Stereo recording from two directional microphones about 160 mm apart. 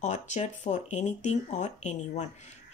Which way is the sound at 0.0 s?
45° left (ahead or behind).